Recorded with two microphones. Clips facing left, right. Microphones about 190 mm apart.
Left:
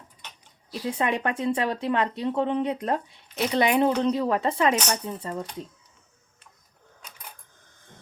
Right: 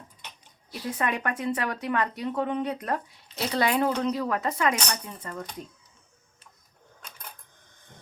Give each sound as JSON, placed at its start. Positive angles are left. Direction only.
{"t": 0.9, "sound": "speech", "side_deg": 25}